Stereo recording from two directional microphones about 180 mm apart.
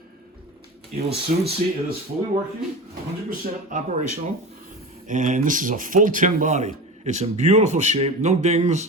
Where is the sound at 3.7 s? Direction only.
45° right (ahead or behind).